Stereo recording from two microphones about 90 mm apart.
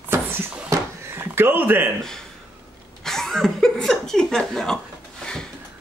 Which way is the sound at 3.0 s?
5° left (ahead or behind).